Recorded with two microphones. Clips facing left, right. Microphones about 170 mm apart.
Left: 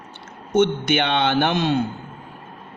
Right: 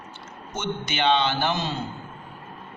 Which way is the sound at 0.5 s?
55° left (ahead or behind).